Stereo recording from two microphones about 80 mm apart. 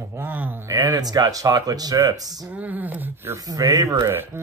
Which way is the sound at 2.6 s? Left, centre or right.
Centre.